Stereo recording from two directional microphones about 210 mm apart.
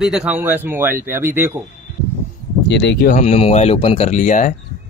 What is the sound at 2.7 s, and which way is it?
Speech, 55° left (ahead or behind).